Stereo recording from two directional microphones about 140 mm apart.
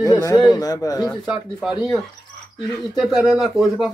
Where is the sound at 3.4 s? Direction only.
Centre (ahead or behind).